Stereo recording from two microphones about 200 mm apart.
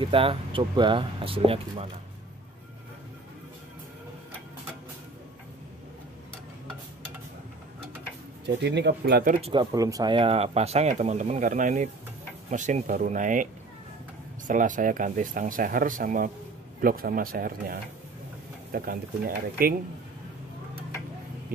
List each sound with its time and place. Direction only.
0.0 s speech: 25° right (ahead or behind)
8.5 s speech: 60° right (ahead or behind)
9.4 s speech: 25° right (ahead or behind); by 13.5 s 40° right (ahead or behind)
14.5 s speech: 40° right (ahead or behind)